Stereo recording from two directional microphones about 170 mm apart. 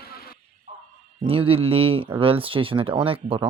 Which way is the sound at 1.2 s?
30° right (ahead or behind).